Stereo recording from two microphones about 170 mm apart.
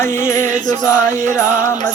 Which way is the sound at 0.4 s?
50° right (ahead or behind).